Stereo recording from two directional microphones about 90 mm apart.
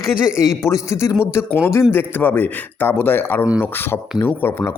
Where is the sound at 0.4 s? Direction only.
35° left (ahead or behind).